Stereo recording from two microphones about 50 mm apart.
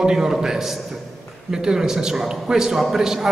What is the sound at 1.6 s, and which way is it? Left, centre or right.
A man's voice, centre.